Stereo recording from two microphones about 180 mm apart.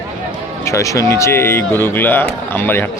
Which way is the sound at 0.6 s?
15° left (ahead or behind).